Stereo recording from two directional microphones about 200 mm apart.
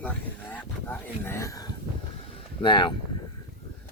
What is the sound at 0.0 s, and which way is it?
Speech, 10° left (ahead or behind).